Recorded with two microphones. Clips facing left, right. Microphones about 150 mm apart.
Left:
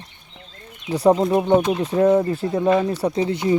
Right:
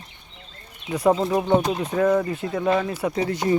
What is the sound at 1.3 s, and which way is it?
Speech, 5° left (ahead or behind).